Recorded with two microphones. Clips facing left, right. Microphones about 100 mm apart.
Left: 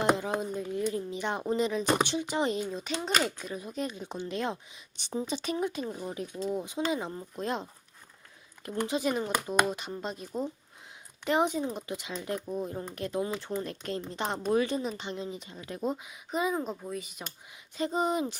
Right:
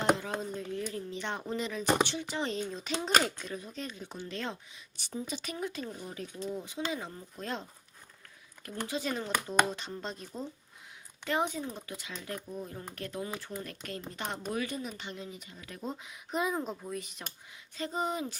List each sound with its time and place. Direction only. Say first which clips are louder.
0.0 s speech: left 2 dB; 15° left (ahead or behind)
2.8 s speech: right 3 dB; centre (ahead or behind); by 7.7 s 20° left (ahead or behind)
8.8 s speech: left 5 dB; 15° left (ahead or behind)
11.3 s speech: left 5 dB; 20° left (ahead or behind)
16.0 s speech: left 2 dB; centre (ahead or behind)
17.7 s speech: left 5 dB; 20° left (ahead or behind)